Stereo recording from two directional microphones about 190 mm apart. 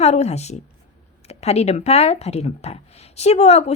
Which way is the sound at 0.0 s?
35° left (ahead or behind).